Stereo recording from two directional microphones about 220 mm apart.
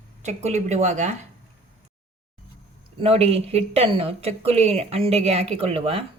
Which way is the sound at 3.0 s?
25° right (ahead or behind).